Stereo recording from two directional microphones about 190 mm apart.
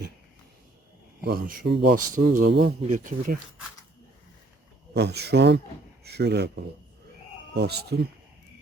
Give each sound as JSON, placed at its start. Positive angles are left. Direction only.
{"t": 1.2, "sound": "speech", "side_deg": -50}
{"t": 4.9, "sound": "speech", "side_deg": -60}
{"t": 7.5, "sound": "speech", "side_deg": -60}